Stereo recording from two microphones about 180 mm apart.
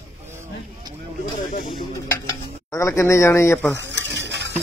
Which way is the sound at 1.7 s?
25° left (ahead or behind).